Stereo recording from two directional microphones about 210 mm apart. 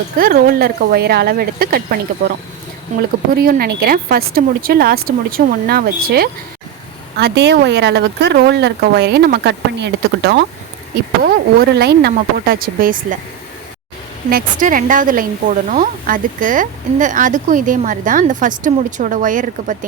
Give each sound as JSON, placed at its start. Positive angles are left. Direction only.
{"t": 0.2, "sound": "speech", "side_deg": -45}
{"t": 3.3, "sound": "speech", "side_deg": -50}
{"t": 11.6, "sound": "speech", "side_deg": -50}
{"t": 14.3, "sound": "a woman's voice", "side_deg": -40}